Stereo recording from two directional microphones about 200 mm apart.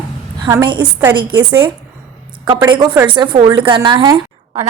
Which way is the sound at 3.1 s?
25° right (ahead or behind).